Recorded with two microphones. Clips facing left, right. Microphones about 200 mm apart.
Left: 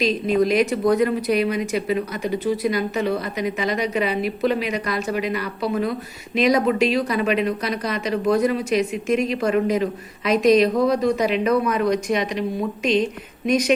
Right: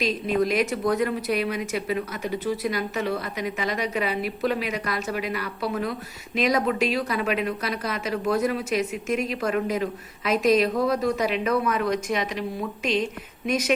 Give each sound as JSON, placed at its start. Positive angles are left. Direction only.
{"t": 0.0, "sound": "speech", "side_deg": -5}